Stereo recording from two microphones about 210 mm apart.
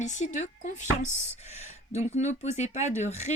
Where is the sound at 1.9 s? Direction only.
35° left (ahead or behind).